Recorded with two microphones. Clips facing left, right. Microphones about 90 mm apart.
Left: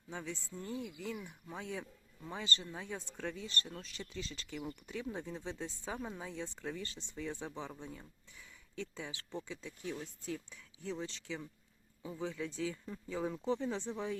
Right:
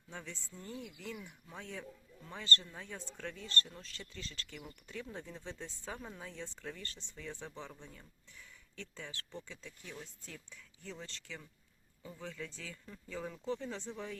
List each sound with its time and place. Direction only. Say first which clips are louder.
0.1 s speech: left 5 dB; 5° left (ahead or behind)